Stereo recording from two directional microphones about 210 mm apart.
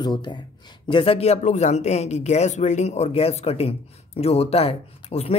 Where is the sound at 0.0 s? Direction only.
20° left (ahead or behind).